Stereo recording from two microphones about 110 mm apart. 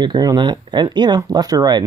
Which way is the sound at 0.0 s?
40° right (ahead or behind).